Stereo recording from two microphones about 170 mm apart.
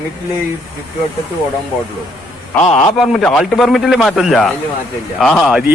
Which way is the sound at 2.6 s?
35° left (ahead or behind).